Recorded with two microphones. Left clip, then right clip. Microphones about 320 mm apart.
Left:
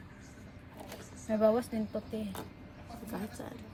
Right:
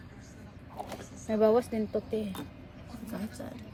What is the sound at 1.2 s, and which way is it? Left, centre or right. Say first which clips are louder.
Speech: right 2 dB; right.